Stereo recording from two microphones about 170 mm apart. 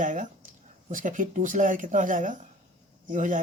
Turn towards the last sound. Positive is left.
turn(degrees=-50)  # may be behind; listen again after turning